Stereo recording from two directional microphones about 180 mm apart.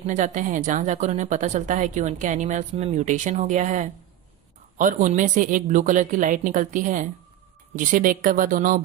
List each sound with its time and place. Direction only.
0.0 s a woman's voice: 45° right (ahead or behind)